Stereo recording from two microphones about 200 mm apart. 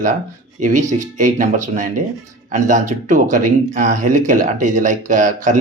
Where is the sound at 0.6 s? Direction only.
40° right (ahead or behind).